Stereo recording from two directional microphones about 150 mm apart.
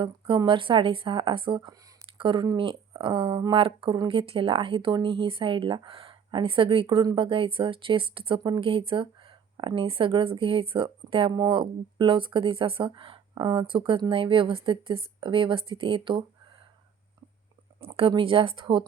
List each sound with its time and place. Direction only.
0.0 s speech: 35° right (ahead or behind)
17.7 s speech: 40° right (ahead or behind)